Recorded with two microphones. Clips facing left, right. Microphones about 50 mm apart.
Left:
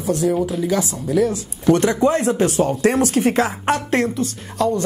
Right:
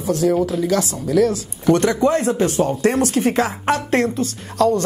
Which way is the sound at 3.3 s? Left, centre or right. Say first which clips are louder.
Even; left.